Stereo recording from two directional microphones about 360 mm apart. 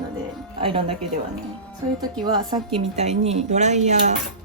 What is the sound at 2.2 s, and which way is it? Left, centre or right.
A woman's voice, centre.